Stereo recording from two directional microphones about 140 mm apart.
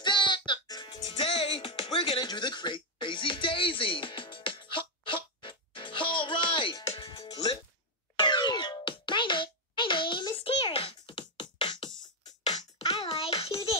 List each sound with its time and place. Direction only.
0.0 s music: 35° left (ahead or behind)